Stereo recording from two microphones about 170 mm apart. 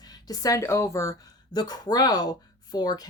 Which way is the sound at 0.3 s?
20° left (ahead or behind).